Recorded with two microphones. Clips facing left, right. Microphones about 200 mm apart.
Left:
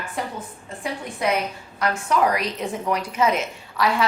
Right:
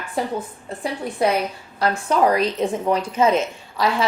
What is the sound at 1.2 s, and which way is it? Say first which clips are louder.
A woman's voice: right 3 dB; 30° right (ahead or behind).